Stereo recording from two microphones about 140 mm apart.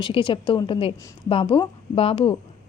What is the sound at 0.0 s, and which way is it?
A woman's voice, 35° left (ahead or behind).